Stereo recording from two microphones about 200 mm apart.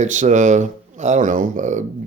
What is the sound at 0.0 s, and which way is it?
Speech, 40° right (ahead or behind).